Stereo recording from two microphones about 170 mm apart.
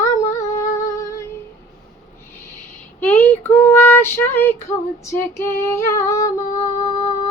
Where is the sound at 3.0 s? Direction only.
10° left (ahead or behind).